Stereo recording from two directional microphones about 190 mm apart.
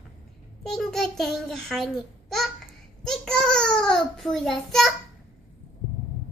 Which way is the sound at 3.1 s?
Centre (ahead or behind).